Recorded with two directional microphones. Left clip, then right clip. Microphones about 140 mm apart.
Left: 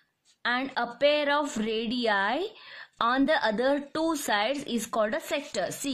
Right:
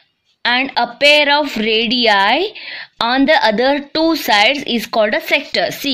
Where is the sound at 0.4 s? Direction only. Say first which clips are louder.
Right 13 dB; 15° right (ahead or behind).